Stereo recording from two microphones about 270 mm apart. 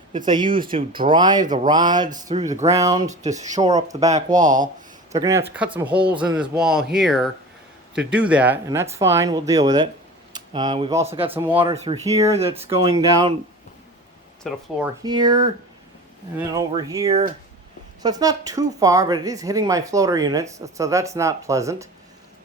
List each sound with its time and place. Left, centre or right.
0.3 s speech: centre
3.1 s speech: right
5.1 s a man's voice: centre
11.3 s speech: centre
14.5 s a man's voice: centre
15.0 s speech: centre
16.6 s speech: centre